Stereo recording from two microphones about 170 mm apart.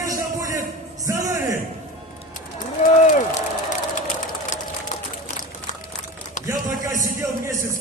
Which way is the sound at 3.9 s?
45° left (ahead or behind).